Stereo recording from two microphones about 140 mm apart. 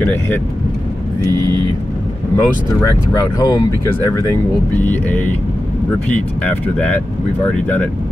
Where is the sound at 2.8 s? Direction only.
20° left (ahead or behind).